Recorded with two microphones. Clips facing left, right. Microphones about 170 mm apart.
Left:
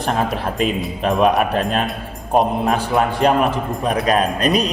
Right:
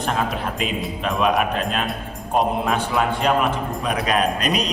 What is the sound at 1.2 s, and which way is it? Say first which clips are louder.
Speech: left 3 dB; 40° left (ahead or behind).